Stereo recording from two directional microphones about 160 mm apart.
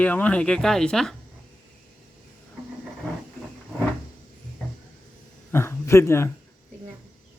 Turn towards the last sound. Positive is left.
turn(degrees=15)  # may be behind; listen again after turning